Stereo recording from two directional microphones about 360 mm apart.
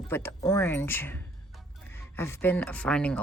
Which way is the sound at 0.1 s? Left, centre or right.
Centre.